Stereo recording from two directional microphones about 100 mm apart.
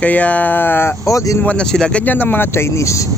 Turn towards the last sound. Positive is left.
turn(degrees=30)  # may be behind; listen again after turning